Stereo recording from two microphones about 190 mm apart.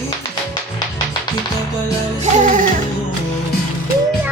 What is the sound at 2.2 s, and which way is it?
Music, 40° right (ahead or behind).